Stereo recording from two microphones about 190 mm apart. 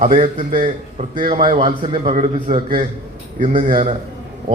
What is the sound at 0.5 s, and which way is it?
Speech, 45° right (ahead or behind).